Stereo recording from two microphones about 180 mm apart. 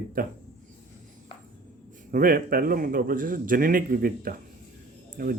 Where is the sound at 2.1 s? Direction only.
50° right (ahead or behind).